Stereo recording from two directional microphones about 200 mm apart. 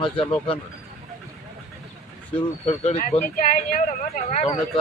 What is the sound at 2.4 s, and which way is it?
Speech, 30° left (ahead or behind).